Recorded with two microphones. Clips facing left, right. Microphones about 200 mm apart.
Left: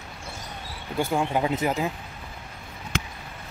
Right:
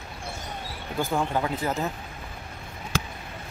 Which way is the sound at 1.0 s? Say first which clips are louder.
Left 2 dB; 10° left (ahead or behind).